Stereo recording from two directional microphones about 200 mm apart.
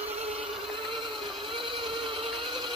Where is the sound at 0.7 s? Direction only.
25° right (ahead or behind).